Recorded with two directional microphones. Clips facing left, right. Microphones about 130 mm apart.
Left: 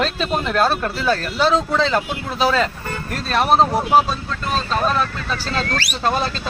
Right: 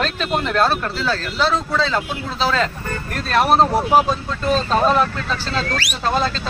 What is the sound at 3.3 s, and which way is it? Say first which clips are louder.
Speech: right 1 dB; centre (ahead or behind).